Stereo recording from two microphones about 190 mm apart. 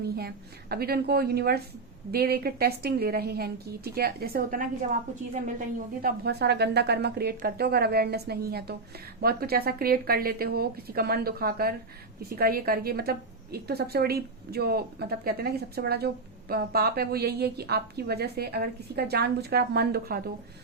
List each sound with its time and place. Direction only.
0.0 s a woman's voice: 55° right (ahead or behind)
6.2 s a woman's voice: 60° right (ahead or behind)